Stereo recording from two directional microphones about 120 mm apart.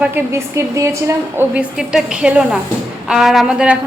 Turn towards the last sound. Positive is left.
turn(degrees=-10)  # may be behind; listen again after turning